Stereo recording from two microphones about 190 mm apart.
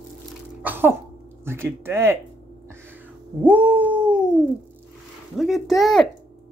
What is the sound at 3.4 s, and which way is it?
Cat, 10° right (ahead or behind).